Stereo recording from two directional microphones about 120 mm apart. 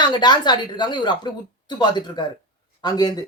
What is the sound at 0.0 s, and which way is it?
Speech, 40° left (ahead or behind).